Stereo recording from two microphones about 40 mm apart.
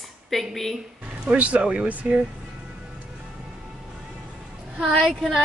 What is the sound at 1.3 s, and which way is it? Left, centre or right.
Speech, right.